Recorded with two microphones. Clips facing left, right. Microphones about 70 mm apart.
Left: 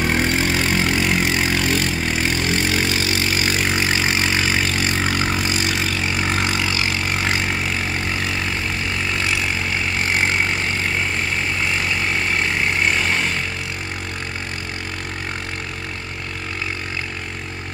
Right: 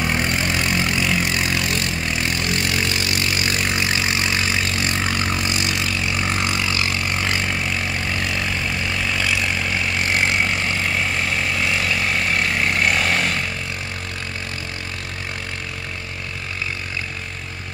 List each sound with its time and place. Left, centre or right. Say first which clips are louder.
0.0 s vehicle: left 2 dB; left
6.8 s vehicle: left 1 dB; left
12.8 s vehicle: even; centre